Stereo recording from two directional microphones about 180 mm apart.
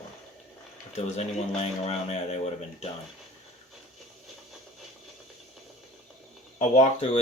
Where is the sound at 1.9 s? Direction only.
35° left (ahead or behind).